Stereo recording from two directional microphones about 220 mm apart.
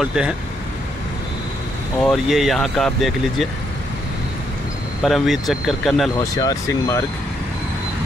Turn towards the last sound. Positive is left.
turn(degrees=15)  # may be behind; listen again after turning